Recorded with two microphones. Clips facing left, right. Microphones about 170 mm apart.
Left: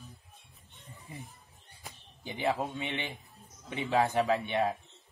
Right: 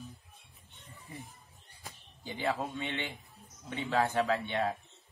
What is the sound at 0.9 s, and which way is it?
Music, 20° left (ahead or behind).